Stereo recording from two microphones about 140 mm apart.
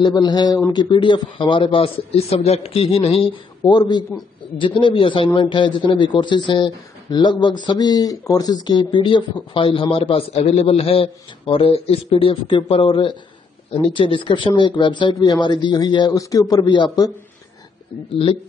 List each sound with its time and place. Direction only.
0.0 s a man's voice: 30° left (ahead or behind)
18.1 s a man's voice: 40° left (ahead or behind)